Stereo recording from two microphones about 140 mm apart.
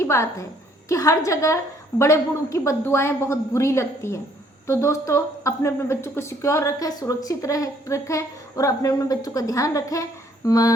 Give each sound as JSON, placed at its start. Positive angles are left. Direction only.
{"t": 0.0, "sound": "a woman's voice", "side_deg": 20}